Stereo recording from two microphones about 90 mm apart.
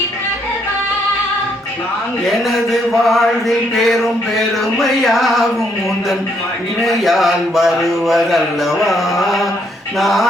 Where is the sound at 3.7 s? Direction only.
Centre (ahead or behind).